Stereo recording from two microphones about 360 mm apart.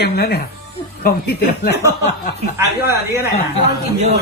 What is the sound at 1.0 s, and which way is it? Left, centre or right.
Speech, left.